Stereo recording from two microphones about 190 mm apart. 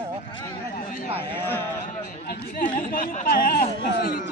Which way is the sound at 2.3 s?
45° left (ahead or behind).